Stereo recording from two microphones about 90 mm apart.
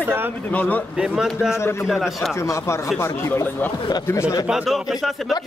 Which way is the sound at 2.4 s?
35° left (ahead or behind).